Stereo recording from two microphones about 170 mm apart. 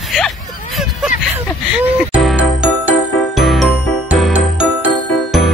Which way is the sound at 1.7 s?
10° right (ahead or behind).